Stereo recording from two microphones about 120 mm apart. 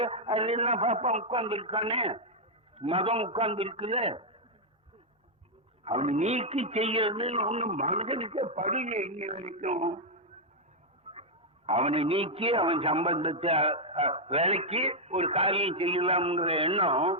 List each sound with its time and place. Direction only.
0.0 s a man's voice: 55° right (ahead or behind)
1.3 s a man's voice: 50° right (ahead or behind)
5.8 s a man's voice: 60° right (ahead or behind)
11.1 s a man's voice: 60° right (ahead or behind)